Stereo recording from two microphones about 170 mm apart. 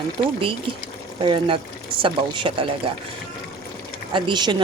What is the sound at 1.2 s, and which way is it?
A woman's voice, 30° right (ahead or behind).